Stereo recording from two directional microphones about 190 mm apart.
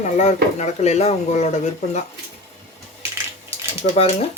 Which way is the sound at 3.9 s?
30° left (ahead or behind).